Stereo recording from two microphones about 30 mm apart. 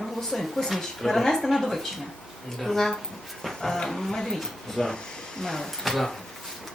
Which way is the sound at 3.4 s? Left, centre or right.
Centre.